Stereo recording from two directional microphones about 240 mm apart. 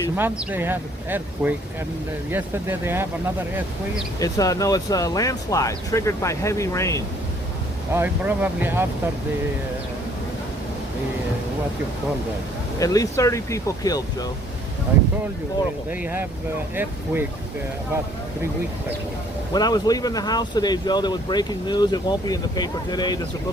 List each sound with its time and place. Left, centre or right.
0.2 s speech: centre
4.2 s speech: centre
7.9 s speech: centre
12.8 s speech: centre
15.9 s speech: centre
19.5 s speech: centre